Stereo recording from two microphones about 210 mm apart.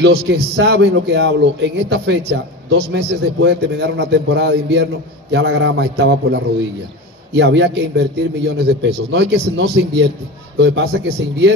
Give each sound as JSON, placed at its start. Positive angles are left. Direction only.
{"t": 0.0, "sound": "a man's voice", "side_deg": -55}